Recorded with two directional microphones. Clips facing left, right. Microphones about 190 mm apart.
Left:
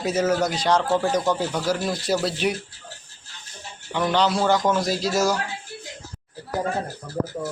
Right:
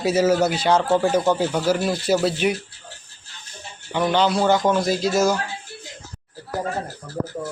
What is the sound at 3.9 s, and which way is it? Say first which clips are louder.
Speech: right 2 dB; 5° right (ahead or behind).